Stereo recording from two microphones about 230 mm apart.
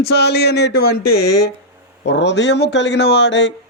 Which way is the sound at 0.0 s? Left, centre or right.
Left.